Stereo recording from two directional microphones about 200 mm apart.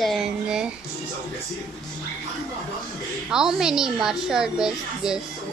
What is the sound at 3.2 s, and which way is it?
A woman's voice, 5° right (ahead or behind).